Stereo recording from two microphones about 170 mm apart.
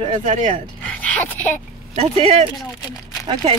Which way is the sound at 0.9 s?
10° left (ahead or behind).